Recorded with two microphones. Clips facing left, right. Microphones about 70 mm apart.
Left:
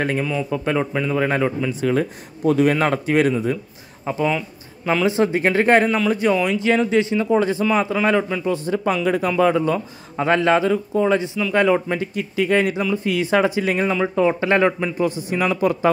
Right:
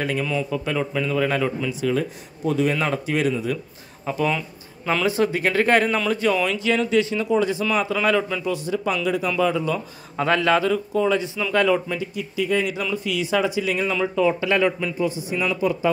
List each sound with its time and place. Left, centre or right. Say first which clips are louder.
0.5 s speech: left 3 dB; left
1.8 s speech: left 3 dB; left
4.0 s speech: left 2 dB; left
5.9 s speech: left 3 dB; centre
7.2 s speech: left 3 dB; left
8.5 s speech: left 3 dB; left
10.1 s speech: left 2 dB; left
11.9 s speech: left 4 dB; left
12.9 s speech: left 3 dB; left
15.0 s speech: left 3 dB; left